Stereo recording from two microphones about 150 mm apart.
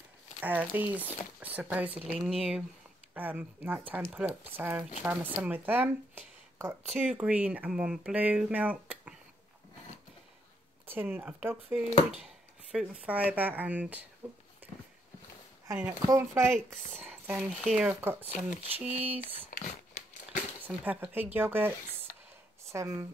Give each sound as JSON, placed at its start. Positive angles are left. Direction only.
{"t": 0.4, "sound": "speech", "side_deg": -10}
{"t": 2.0, "sound": "speech", "side_deg": 0}
{"t": 3.2, "sound": "speech", "side_deg": -10}
{"t": 10.9, "sound": "speech", "side_deg": -15}
{"t": 15.7, "sound": "speech", "side_deg": -10}
{"t": 17.0, "sound": "a sound", "side_deg": -10}
{"t": 17.4, "sound": "speech", "side_deg": 0}
{"t": 19.5, "sound": "a sound", "side_deg": 55}
{"t": 20.6, "sound": "speech", "side_deg": -10}